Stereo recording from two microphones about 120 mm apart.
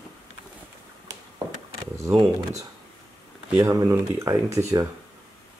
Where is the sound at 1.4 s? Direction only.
40° right (ahead or behind).